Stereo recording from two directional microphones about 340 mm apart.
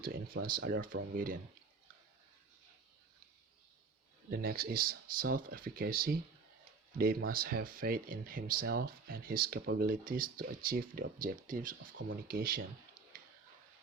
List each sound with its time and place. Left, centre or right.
0.0 s speech: right
4.3 s speech: right